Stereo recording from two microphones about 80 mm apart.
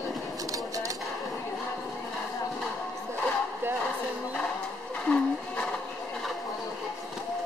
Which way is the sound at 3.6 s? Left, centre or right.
Right.